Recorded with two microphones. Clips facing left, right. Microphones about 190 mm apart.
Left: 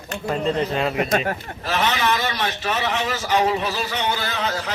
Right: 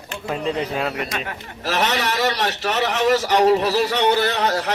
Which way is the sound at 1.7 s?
70° right (ahead or behind).